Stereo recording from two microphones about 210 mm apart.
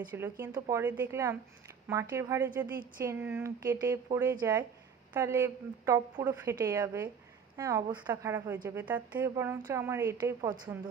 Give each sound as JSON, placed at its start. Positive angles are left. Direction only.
{"t": 0.1, "sound": "a woman's voice", "side_deg": -10}